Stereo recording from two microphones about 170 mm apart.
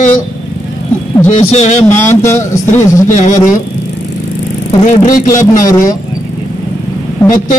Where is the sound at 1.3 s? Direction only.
40° left (ahead or behind).